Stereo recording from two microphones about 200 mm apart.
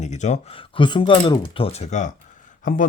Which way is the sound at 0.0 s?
35° left (ahead or behind).